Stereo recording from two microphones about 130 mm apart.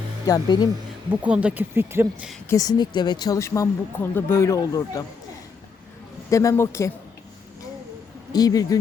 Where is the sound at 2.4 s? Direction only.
25° left (ahead or behind).